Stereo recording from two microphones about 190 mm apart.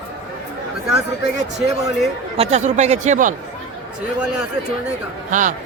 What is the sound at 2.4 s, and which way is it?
Speech, 35° right (ahead or behind).